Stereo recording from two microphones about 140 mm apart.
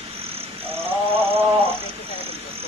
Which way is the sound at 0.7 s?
15° right (ahead or behind).